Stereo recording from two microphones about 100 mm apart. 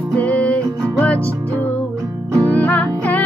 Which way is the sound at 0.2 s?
15° left (ahead or behind).